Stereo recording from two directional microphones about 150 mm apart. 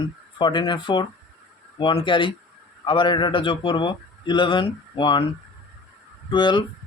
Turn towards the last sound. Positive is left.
turn(degrees=30)  # may be behind; listen again after turning